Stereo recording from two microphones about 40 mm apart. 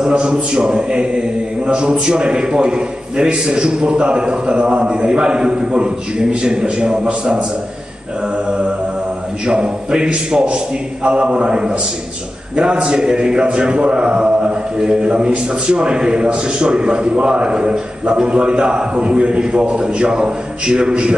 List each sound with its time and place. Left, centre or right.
0.1 s a man's voice: right
8.5 s music: right
9.5 s a man's voice: right